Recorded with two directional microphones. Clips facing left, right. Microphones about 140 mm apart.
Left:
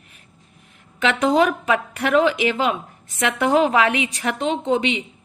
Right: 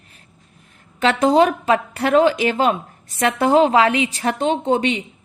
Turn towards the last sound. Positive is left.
turn(degrees=-40)  # may be behind; listen again after turning